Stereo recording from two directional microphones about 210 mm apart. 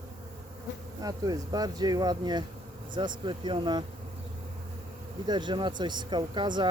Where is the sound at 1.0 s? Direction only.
15° right (ahead or behind).